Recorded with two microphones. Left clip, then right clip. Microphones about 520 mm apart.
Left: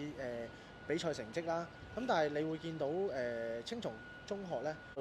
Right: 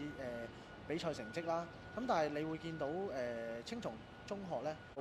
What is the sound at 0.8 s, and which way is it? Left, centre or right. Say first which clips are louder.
Speech: left 3 dB; left.